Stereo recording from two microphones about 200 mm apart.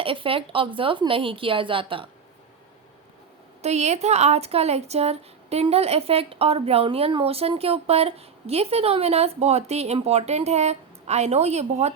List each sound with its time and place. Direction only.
0.0 s speech: 25° right (ahead or behind)
3.6 s a woman's voice: 35° right (ahead or behind)